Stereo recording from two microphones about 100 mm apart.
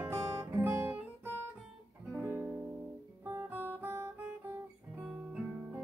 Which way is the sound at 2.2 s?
20° right (ahead or behind).